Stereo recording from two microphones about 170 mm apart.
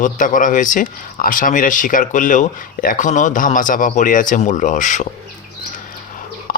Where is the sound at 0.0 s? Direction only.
50° left (ahead or behind).